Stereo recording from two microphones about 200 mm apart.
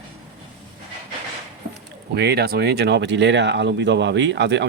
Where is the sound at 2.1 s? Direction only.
55° right (ahead or behind).